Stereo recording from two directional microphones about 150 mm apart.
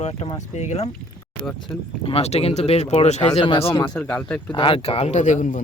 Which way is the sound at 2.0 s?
45° left (ahead or behind).